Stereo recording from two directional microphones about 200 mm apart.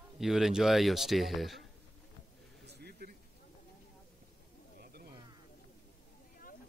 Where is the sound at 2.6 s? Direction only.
55° right (ahead or behind).